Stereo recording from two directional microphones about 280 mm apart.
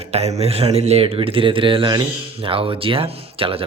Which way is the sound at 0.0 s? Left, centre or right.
Right.